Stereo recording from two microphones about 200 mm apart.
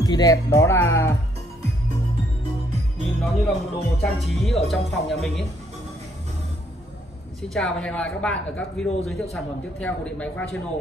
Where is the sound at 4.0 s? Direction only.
Centre (ahead or behind).